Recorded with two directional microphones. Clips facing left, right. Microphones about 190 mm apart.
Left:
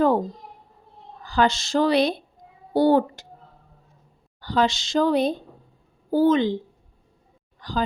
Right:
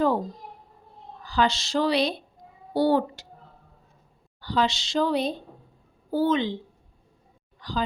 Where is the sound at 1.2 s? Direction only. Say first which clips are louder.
Left 3 dB; 50° left (ahead or behind).